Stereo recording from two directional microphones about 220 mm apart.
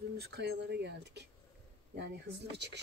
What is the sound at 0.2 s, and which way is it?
Speech, 45° right (ahead or behind).